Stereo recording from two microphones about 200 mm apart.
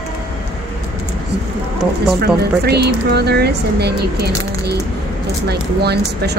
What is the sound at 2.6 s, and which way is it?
Speech, 55° right (ahead or behind).